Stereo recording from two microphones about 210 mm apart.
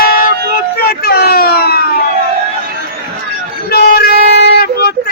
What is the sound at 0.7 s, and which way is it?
Speech, 50° left (ahead or behind).